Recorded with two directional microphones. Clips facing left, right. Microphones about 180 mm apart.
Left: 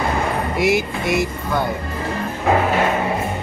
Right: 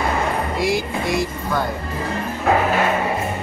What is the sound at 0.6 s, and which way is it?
Speech, 20° left (ahead or behind).